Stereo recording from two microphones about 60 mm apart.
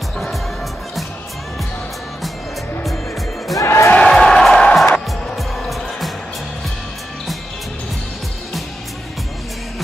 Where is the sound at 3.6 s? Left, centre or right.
Left.